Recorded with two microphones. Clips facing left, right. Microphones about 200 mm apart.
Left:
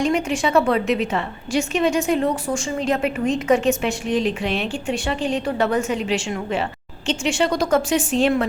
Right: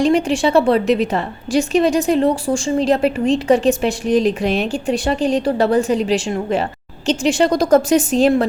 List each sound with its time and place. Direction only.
0.0 s a woman's voice: 35° right (ahead or behind)